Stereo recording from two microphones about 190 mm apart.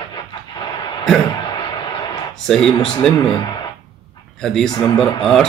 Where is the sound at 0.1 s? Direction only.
25° left (ahead or behind).